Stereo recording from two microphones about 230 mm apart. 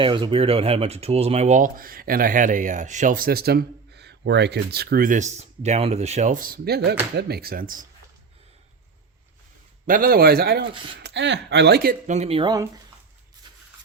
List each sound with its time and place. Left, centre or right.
0.0 s speech: right
9.8 s speech: right; by 12.6 s centre